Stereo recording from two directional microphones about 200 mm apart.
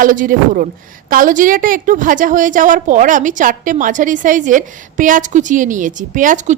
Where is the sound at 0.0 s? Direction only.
40° right (ahead or behind).